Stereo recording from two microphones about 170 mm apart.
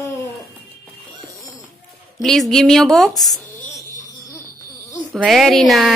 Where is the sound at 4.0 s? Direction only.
20° left (ahead or behind).